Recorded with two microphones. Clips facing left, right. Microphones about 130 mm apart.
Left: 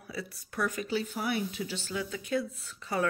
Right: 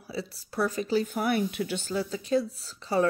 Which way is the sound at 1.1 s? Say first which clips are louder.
Right 5 dB; 55° right (ahead or behind).